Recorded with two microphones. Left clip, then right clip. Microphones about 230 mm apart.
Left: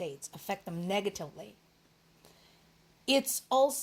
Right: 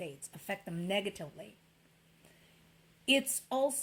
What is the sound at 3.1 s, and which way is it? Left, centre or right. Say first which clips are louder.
Speech: left 2 dB; left.